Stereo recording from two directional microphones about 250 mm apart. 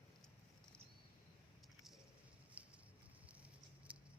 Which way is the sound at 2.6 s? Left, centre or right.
Centre.